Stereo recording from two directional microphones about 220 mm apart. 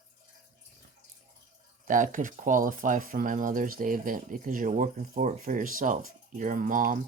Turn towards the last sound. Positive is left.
turn(degrees=-35)  # may be behind; listen again after turning